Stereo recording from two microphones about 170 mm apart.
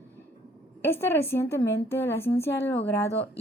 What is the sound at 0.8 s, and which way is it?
Speech, 15° left (ahead or behind).